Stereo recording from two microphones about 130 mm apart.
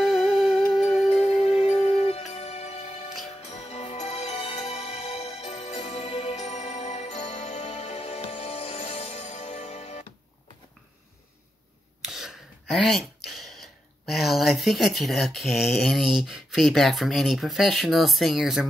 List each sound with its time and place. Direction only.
0.0 s music: centre (ahead or behind)
1.0 s music: 50° left (ahead or behind)
12.0 s a sound: centre (ahead or behind)
14.1 s speech: centre (ahead or behind)